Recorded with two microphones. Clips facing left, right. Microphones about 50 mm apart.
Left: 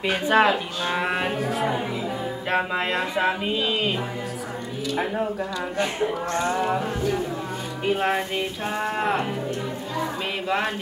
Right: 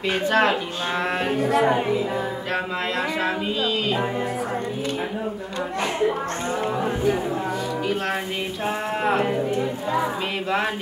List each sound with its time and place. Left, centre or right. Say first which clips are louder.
0.0 s speech: left 1 dB; centre
2.5 s speech: left 3 dB; left
6.8 s speech: right 3 dB; centre
8.6 s a sound: right 2 dB; centre